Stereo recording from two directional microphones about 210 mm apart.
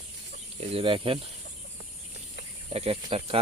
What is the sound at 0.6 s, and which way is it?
Speech, 25° right (ahead or behind).